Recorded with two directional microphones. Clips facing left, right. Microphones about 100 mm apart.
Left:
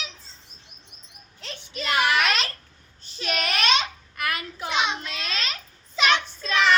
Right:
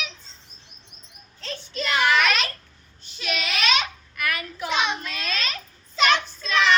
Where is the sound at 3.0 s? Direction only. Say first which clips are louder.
Left 1 dB; 40° left (ahead or behind).